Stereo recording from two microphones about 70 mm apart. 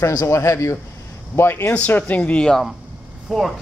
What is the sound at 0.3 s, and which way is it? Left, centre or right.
A man's voice, left.